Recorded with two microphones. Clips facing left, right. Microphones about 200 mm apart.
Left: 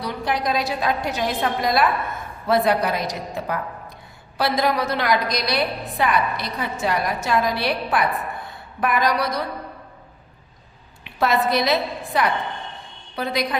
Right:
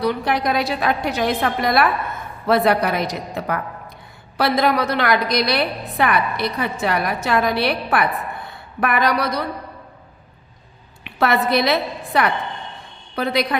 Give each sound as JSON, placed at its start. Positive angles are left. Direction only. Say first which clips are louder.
{"t": 0.0, "sound": "a woman's voice", "louder": "right 4 dB", "side_deg": -65}
{"t": 11.0, "sound": "a woman's voice", "louder": "right 1 dB", "side_deg": -65}